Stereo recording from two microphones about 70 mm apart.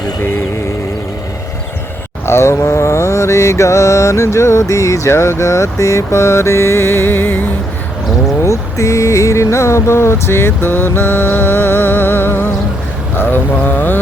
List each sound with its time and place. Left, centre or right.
2.2 s mantra: left
8.4 s mantra: left
13.6 s speech: left